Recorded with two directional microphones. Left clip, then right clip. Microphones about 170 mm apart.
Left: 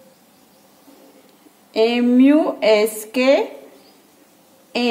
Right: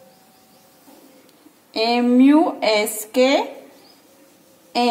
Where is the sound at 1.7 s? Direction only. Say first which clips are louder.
Left 2 dB; 25° left (ahead or behind).